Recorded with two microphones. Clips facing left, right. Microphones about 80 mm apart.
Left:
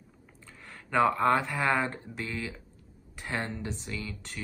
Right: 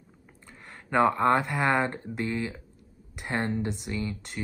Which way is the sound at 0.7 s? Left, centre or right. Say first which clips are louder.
Right 2 dB; centre.